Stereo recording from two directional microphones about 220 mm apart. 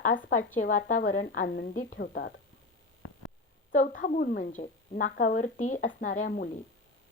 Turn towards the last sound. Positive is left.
turn(degrees=40)  # may be behind; listen again after turning